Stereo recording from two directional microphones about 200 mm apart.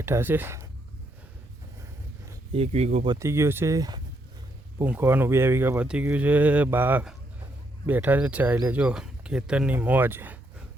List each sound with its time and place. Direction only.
0.0 s speech: 10° right (ahead or behind)
2.5 s speech: 30° right (ahead or behind)
3.1 s speech: 15° right (ahead or behind)